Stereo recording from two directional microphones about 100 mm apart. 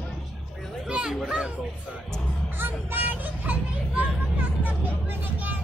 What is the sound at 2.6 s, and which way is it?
Vehicle, 20° right (ahead or behind).